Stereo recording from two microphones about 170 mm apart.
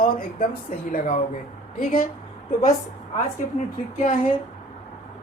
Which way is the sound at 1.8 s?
50° left (ahead or behind).